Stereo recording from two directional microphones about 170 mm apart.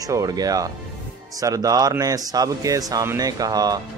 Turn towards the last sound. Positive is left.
turn(degrees=-20)  # may be behind; listen again after turning